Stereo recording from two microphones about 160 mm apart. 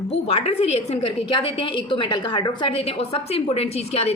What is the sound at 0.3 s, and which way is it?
A woman's voice, 40° left (ahead or behind).